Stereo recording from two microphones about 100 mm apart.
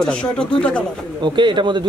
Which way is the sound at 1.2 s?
50° right (ahead or behind).